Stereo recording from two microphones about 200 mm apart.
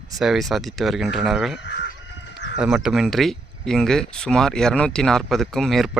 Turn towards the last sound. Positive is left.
turn(degrees=0)  # may be behind; listen again after turning